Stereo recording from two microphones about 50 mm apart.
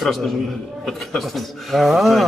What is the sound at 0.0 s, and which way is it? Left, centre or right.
Speech, centre.